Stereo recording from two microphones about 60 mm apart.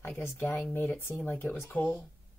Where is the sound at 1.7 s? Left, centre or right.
Left.